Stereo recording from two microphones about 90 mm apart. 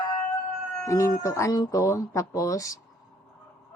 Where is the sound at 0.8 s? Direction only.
35° left (ahead or behind).